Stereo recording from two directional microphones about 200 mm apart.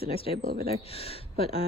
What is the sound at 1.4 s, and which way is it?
Speech, 30° left (ahead or behind).